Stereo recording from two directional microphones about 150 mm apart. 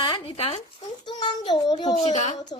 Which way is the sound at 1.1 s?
30° left (ahead or behind).